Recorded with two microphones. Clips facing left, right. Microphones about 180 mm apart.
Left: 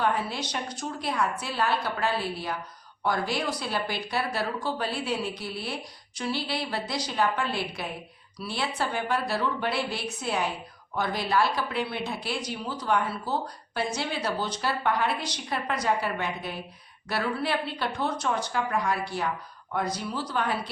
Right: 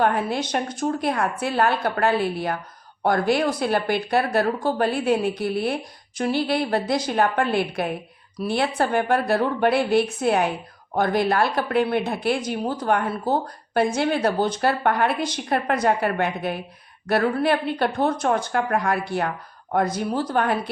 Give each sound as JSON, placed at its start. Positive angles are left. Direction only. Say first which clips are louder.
{"t": 0.0, "sound": "a woman's voice", "louder": "right 6 dB", "side_deg": -55}